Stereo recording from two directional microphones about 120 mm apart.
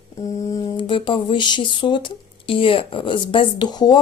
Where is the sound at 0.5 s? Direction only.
40° left (ahead or behind).